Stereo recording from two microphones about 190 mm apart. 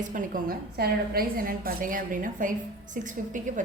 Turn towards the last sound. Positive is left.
turn(degrees=-40)  # may be behind; listen again after turning